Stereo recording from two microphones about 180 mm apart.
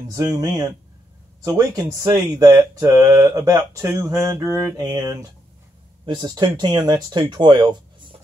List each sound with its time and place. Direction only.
0.1 s speech: 20° right (ahead or behind)